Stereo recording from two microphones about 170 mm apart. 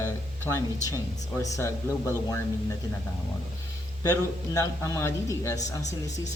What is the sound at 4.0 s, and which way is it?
A man's voice, 20° left (ahead or behind).